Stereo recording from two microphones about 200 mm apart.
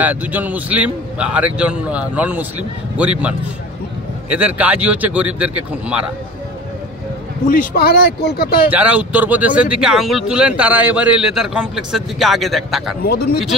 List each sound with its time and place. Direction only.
0.0 s a man's voice: 10° right (ahead or behind)
7.4 s speech: 45° left (ahead or behind)
8.6 s a man's voice: 5° right (ahead or behind)
13.0 s a man's voice: 55° left (ahead or behind)